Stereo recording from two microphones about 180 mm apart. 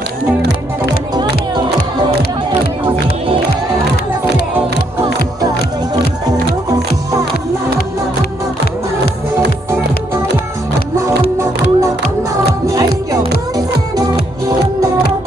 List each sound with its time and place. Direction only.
1.5 s music: 25° right (ahead or behind)
11.0 s music: 15° right (ahead or behind)